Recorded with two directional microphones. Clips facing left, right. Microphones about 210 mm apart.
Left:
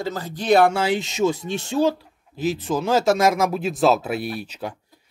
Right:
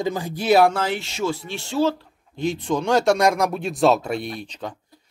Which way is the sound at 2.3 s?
5° left (ahead or behind).